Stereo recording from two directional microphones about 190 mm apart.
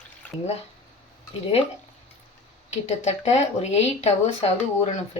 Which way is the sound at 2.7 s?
35° left (ahead or behind).